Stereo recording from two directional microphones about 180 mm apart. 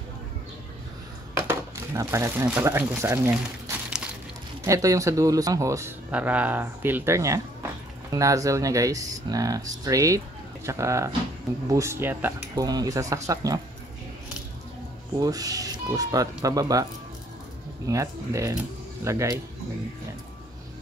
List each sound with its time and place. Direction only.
1.5 s speech: 15° right (ahead or behind)
15.1 s speech: 20° right (ahead or behind)
17.8 s speech: 15° right (ahead or behind)